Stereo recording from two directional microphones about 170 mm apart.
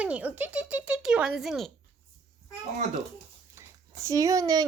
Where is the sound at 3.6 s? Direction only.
20° right (ahead or behind).